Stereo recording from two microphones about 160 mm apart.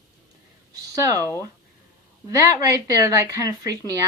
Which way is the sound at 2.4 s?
20° right (ahead or behind).